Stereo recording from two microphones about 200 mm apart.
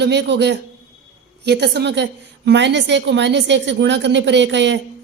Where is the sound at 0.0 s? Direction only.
60° right (ahead or behind).